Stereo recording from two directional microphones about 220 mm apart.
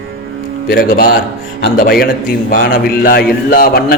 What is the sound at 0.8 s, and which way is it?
A man's voice, 40° left (ahead or behind).